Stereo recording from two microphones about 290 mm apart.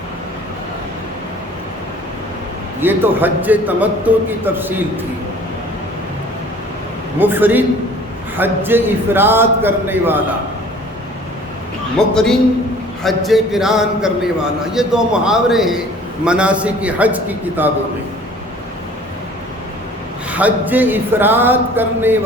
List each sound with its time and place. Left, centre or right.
2.8 s a man's voice: centre
7.2 s a man's voice: centre
11.9 s a man's voice: centre
20.3 s a man's voice: centre